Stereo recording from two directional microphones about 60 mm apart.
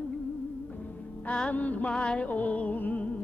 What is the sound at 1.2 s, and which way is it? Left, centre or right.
Music, left.